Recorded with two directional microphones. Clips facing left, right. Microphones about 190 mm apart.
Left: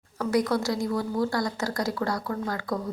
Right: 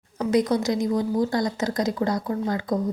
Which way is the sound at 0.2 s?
20° right (ahead or behind).